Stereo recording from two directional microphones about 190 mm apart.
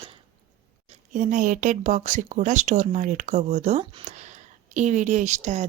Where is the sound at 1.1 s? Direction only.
40° right (ahead or behind).